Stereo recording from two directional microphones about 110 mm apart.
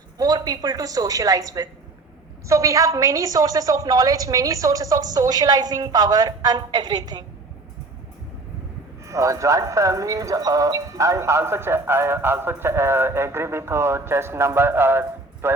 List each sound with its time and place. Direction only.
0.2 s a woman's voice: 35° right (ahead or behind)
9.0 s speech: 30° right (ahead or behind)